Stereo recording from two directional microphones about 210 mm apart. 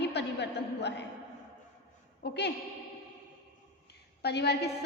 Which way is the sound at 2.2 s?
55° left (ahead or behind).